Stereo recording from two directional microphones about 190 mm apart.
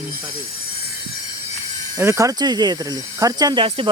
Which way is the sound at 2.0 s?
15° right (ahead or behind).